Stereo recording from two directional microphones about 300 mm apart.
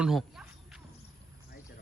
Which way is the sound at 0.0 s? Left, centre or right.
Centre.